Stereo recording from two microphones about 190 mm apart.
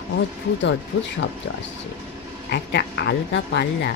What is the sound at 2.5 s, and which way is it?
Speech, 60° left (ahead or behind).